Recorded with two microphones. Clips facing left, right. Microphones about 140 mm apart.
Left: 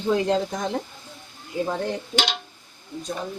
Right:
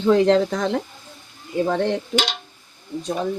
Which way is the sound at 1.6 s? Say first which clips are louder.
Right 6 dB; 75° right (ahead or behind).